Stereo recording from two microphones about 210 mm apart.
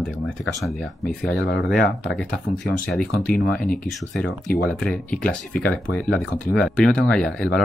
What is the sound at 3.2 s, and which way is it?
Speech, 5° left (ahead or behind).